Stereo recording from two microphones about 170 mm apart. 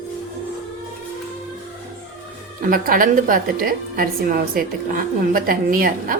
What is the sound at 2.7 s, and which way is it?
A woman's voice, 55° right (ahead or behind).